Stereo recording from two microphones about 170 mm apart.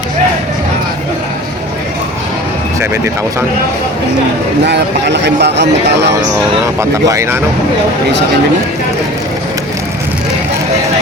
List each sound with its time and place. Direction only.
4.6 s speech: 90° right
6.7 s speech: 15° right (ahead or behind)